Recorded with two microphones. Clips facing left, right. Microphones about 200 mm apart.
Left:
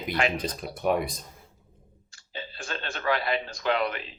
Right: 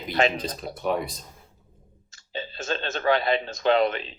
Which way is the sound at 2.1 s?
25° right (ahead or behind).